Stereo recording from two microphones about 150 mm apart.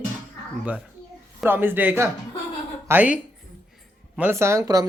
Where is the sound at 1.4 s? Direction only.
15° right (ahead or behind).